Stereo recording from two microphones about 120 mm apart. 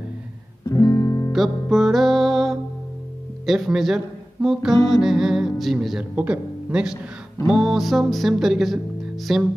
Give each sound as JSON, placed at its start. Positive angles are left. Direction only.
{"t": 0.7, "sound": "music", "side_deg": 25}
{"t": 1.3, "sound": "music", "side_deg": 0}
{"t": 3.4, "sound": "speech", "side_deg": 0}